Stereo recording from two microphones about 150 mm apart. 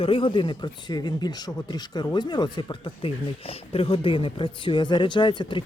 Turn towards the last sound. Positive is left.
turn(degrees=30)  # may be behind; listen again after turning